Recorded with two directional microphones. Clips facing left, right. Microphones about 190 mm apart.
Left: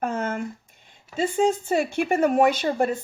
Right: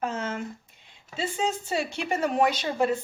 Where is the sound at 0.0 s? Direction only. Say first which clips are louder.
Left 4 dB; 55° left (ahead or behind).